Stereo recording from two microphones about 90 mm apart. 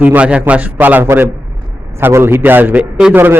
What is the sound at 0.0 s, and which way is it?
A man's voice, 15° right (ahead or behind).